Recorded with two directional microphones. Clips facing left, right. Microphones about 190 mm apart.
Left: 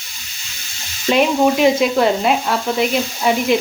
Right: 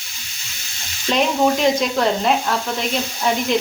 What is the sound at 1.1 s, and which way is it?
Sizzle, 5° left (ahead or behind).